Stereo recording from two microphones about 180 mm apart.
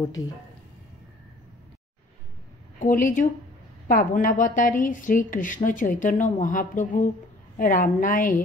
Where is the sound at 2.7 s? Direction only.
50° left (ahead or behind).